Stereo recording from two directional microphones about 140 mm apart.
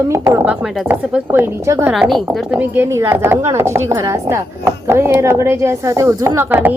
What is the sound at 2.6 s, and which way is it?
A woman's voice, 15° right (ahead or behind).